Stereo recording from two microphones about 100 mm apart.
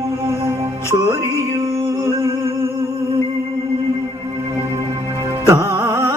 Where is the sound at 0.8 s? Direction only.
25° right (ahead or behind).